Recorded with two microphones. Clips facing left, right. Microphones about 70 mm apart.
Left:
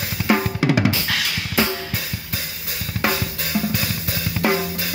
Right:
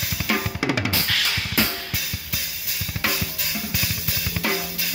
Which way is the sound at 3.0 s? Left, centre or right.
Left.